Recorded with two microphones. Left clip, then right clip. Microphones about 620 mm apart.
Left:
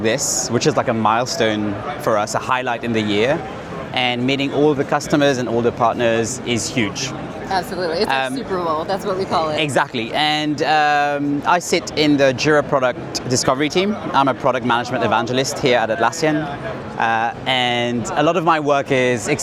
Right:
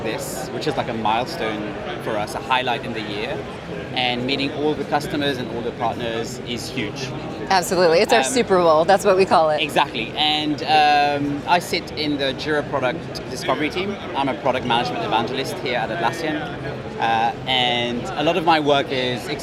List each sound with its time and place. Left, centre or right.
0.0 s speech: left
7.5 s speech: right
9.6 s speech: left